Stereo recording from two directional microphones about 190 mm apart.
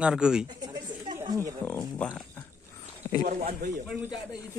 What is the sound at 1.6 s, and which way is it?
Speech, 10° left (ahead or behind).